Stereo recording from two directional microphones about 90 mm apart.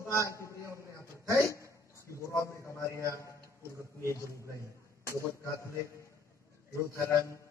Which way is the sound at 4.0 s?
30° left (ahead or behind).